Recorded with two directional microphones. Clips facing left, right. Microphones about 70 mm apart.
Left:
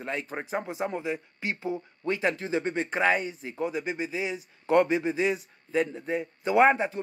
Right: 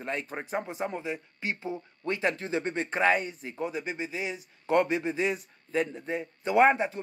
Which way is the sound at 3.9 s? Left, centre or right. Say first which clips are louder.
Left 3 dB; centre.